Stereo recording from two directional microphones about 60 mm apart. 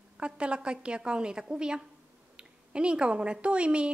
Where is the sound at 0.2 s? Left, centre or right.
Centre.